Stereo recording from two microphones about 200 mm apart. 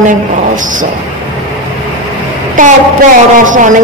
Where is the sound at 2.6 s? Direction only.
45° right (ahead or behind).